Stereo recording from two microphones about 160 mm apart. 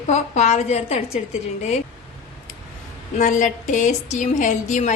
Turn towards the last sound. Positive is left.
turn(degrees=50)  # may be behind; listen again after turning